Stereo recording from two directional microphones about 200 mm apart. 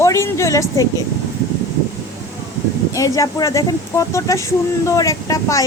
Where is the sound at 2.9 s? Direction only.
15° left (ahead or behind).